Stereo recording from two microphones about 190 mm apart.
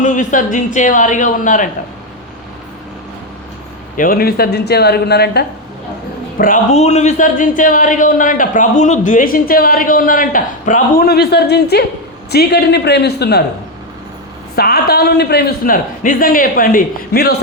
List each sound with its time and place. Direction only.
0.0 s a man's voice: 40° left (ahead or behind)
3.9 s a man's voice: 45° left (ahead or behind)
6.3 s a man's voice: 45° left (ahead or behind)
14.5 s a man's voice: 55° left (ahead or behind)